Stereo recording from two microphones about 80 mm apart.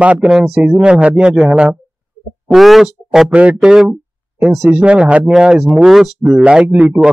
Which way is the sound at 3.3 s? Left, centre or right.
Centre.